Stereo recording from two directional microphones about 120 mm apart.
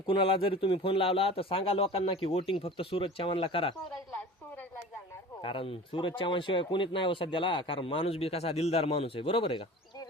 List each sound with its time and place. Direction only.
0.0 s speech: 45° left (ahead or behind)
5.4 s speech: 45° left (ahead or behind)